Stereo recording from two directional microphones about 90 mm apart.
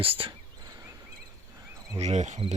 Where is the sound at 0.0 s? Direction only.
85° right.